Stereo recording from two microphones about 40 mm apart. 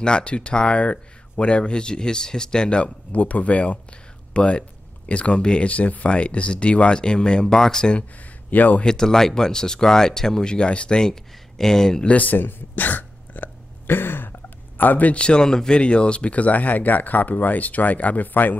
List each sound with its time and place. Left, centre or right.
0.0 s speech: left
2.8 s speech: left
4.3 s speech: left
8.5 s speech: left
8.8 s speech: centre
12.1 s speech: left
13.8 s a sound: left
15.1 s speech: left
15.8 s speech: left